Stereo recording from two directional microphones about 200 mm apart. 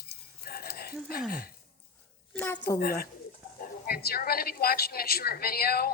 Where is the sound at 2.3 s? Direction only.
10° left (ahead or behind).